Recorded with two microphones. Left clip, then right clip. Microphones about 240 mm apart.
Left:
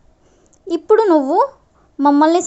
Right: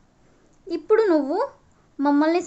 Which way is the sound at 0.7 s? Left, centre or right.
Left.